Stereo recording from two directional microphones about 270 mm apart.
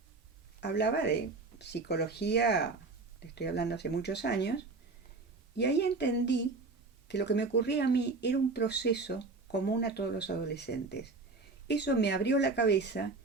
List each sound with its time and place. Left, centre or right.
0.6 s speech: left